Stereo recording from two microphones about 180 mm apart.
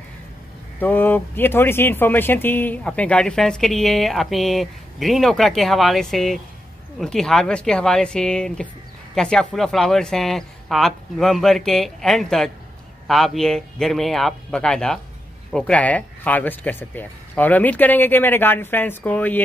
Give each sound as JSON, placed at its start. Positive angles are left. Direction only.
{"t": 0.7, "sound": "speech", "side_deg": 10}